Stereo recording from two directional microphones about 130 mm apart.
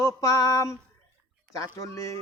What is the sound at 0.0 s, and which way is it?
Speech, 25° left (ahead or behind).